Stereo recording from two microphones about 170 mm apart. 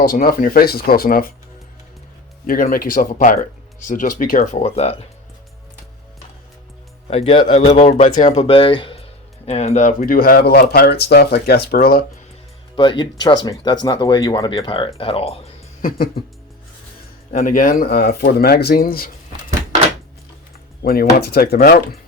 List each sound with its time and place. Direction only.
0.0 s speech: 60° left (ahead or behind)
2.5 s speech: 55° left (ahead or behind)
4.6 s speech: 35° left (ahead or behind)
7.1 s speech: 35° left (ahead or behind)
10.0 s speech: 60° left (ahead or behind)
12.7 s speech: 30° left (ahead or behind)
15.8 s music: 55° left (ahead or behind)
17.3 s speech: 55° left (ahead or behind)
20.8 s speech: 60° left (ahead or behind)